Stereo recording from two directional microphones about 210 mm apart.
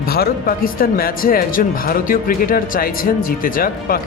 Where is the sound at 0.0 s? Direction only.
45° left (ahead or behind).